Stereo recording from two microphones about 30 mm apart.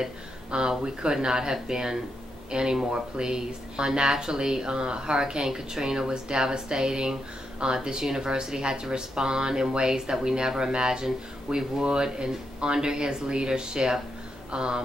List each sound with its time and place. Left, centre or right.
0.5 s speech: right